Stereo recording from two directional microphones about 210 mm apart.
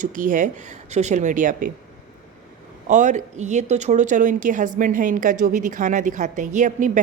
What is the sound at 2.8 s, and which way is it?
A woman's voice, 35° right (ahead or behind).